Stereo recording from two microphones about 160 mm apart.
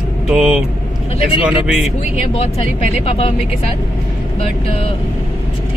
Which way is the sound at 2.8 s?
35° left (ahead or behind).